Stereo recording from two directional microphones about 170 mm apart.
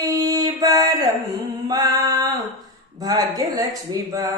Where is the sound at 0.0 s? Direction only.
20° right (ahead or behind).